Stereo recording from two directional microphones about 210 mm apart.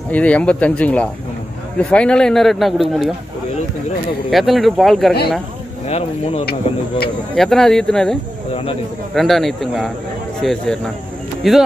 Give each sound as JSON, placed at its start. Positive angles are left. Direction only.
{"t": 0.1, "sound": "a man's voice", "side_deg": 5}
{"t": 4.3, "sound": "a man's voice", "side_deg": 0}
{"t": 5.9, "sound": "speech", "side_deg": 30}
{"t": 7.3, "sound": "a man's voice", "side_deg": 0}